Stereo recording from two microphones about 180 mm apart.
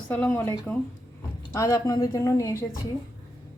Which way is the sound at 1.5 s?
20° left (ahead or behind).